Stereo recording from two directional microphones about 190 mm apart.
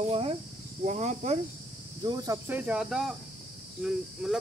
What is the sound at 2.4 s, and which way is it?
Cricket, 10° right (ahead or behind).